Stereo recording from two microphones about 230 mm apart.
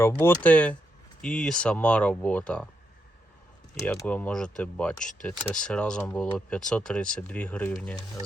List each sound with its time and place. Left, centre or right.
0.0 s speech: centre
3.8 s speech: centre